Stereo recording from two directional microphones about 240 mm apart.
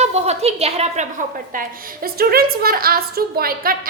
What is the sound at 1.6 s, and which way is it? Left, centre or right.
A woman's voice, right.